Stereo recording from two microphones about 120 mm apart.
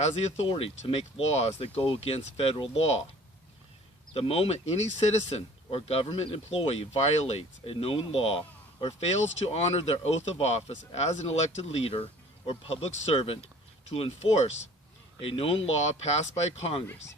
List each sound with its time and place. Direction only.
0.0 s speech: 50° left (ahead or behind)
4.1 s speech: 55° left (ahead or behind)